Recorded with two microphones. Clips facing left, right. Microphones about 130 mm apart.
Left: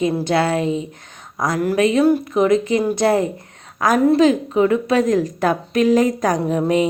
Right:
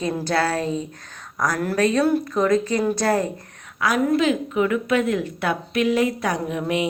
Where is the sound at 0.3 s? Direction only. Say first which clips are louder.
Left 1 dB; 25° left (ahead or behind).